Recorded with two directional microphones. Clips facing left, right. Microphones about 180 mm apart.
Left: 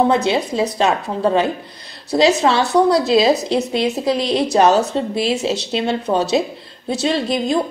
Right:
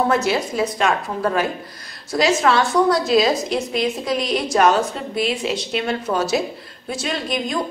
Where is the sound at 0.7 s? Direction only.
20° left (ahead or behind).